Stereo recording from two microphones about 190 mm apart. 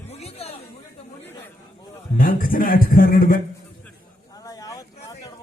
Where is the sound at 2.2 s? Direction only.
50° left (ahead or behind).